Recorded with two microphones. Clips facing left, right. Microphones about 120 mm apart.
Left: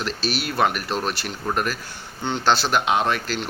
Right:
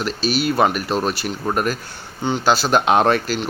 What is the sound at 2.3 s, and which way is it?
Speech, 5° right (ahead or behind).